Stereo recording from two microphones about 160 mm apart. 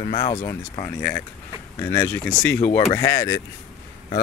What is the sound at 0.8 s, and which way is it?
Speech, 10° left (ahead or behind).